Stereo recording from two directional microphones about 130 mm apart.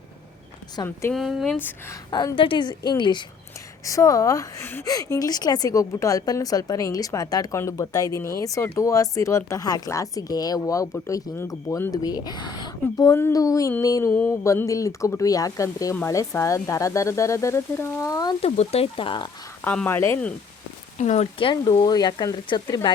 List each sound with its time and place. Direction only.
0.8 s speech: 30° left (ahead or behind)
1.1 s speech: centre (ahead or behind)
1.5 s speech: 15° left (ahead or behind)
2.0 s speech: 35° left (ahead or behind)
3.8 s speech: 25° left (ahead or behind)
4.6 s speech: 15° left (ahead or behind)
4.9 s speech: 25° left (ahead or behind)
18.4 s speech: 55° left (ahead or behind)
19.6 s speech: 15° left (ahead or behind)
21.0 s speech: 60° left (ahead or behind)
21.3 s speech: 40° left (ahead or behind)